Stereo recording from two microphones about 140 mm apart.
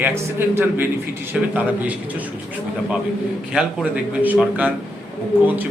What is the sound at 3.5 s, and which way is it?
A man's voice, 5° right (ahead or behind).